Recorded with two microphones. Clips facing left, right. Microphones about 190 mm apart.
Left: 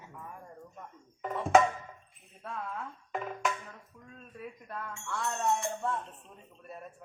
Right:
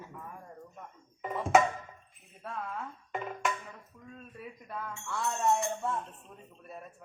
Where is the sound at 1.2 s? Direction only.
Centre (ahead or behind).